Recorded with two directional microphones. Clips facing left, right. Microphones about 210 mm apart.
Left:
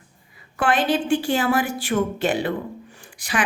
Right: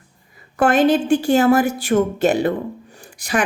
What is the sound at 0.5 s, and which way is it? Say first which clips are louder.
Speech: right 6 dB; 40° right (ahead or behind).